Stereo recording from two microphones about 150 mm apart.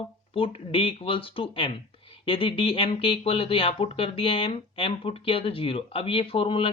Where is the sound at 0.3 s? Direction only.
35° left (ahead or behind).